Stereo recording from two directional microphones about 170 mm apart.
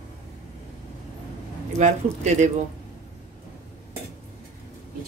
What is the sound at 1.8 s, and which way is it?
Speech, 45° right (ahead or behind).